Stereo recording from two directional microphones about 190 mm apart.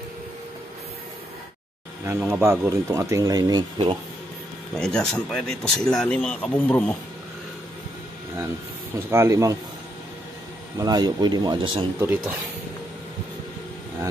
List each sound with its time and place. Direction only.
2.1 s speech: 10° right (ahead or behind)
4.7 s speech: 5° left (ahead or behind)
9.1 s speech: 15° right (ahead or behind)
10.8 s speech: 20° right (ahead or behind)
12.0 s speech: 10° right (ahead or behind)